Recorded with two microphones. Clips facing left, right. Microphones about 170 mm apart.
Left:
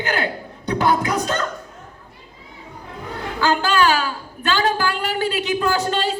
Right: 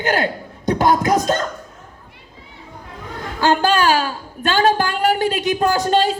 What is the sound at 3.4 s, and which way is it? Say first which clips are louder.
A woman's voice: right 2 dB; 40° right (ahead or behind).